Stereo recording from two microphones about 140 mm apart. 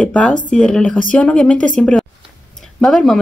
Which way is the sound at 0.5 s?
5° left (ahead or behind).